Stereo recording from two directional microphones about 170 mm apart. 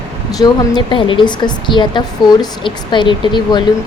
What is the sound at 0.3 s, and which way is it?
A woman's voice, 25° left (ahead or behind).